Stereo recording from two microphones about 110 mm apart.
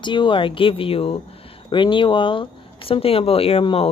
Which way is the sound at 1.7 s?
45° left (ahead or behind).